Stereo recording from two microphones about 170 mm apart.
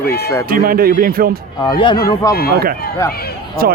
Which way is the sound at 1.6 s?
25° left (ahead or behind).